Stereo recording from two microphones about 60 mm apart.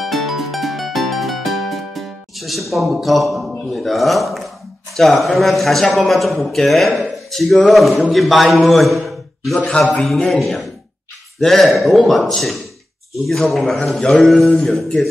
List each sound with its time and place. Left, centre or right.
0.0 s music: centre
4.9 s a man's voice: centre
9.6 s a man's voice: left
10.0 s a man's voice: centre
14.1 s a sound: centre